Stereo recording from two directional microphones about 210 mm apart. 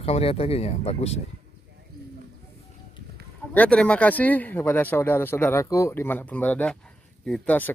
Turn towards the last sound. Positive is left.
turn(degrees=5)  # may be behind; listen again after turning